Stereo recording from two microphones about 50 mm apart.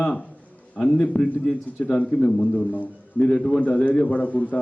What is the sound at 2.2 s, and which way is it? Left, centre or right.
A man's voice, left.